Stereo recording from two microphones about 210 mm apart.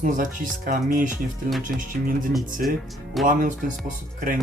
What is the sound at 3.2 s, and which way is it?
Speech, 40° right (ahead or behind).